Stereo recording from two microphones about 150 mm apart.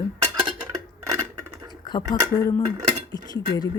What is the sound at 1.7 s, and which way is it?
Speech, 30° left (ahead or behind).